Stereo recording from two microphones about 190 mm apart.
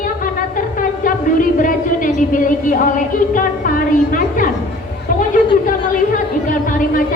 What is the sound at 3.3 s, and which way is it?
Music, 45° left (ahead or behind).